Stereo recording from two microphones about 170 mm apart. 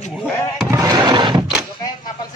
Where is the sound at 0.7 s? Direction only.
20° right (ahead or behind).